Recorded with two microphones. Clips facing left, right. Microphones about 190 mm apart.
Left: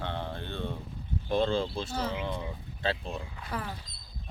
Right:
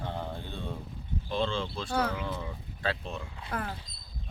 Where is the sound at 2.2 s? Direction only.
20° left (ahead or behind).